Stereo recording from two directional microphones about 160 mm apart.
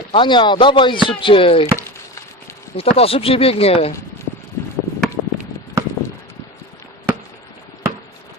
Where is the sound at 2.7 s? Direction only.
40° left (ahead or behind).